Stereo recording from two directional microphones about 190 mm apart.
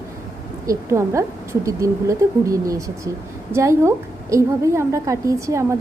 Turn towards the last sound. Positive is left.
turn(degrees=-15)  # may be behind; listen again after turning